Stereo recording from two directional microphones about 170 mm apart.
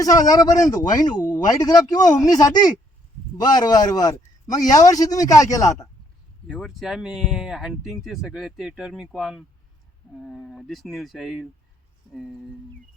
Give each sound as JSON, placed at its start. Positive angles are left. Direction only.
{"t": 0.0, "sound": "a man's voice", "side_deg": 20}
{"t": 6.5, "sound": "speech", "side_deg": 0}